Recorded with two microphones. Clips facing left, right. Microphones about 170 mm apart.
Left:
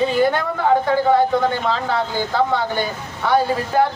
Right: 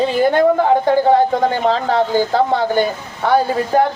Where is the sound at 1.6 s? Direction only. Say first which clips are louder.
Right 5 dB; 40° right (ahead or behind).